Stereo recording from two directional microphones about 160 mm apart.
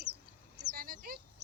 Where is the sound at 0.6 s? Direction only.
65° right (ahead or behind).